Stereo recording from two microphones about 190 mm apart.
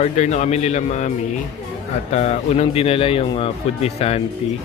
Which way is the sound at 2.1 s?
35° left (ahead or behind).